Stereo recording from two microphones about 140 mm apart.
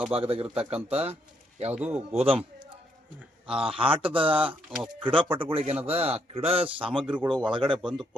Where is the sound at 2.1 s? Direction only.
45° right (ahead or behind).